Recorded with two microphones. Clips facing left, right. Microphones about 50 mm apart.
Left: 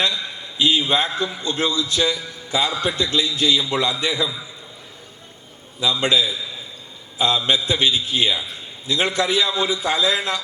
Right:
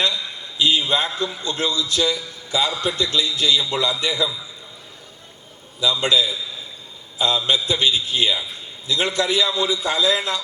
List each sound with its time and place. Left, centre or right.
0.5 s a man's voice: left
5.8 s a man's voice: left